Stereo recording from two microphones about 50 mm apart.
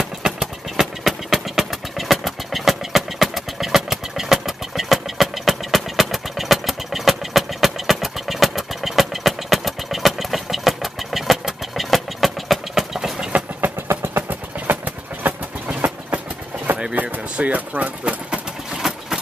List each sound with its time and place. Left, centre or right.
0.0 s vehicle: centre
13.6 s vehicle: right
14.7 s train: right
16.9 s bird: right
18.8 s engine: centre